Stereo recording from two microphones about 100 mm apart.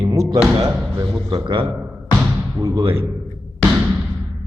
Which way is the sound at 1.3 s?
50° right (ahead or behind).